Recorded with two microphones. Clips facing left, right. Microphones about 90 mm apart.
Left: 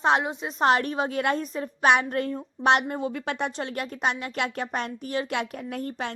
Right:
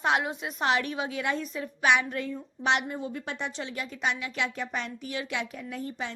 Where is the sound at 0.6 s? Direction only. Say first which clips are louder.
Left 5 dB; 40° left (ahead or behind).